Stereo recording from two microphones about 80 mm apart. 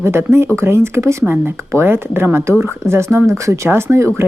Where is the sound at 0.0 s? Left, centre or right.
Right.